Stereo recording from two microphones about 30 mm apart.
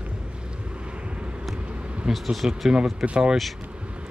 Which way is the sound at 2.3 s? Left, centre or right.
Centre.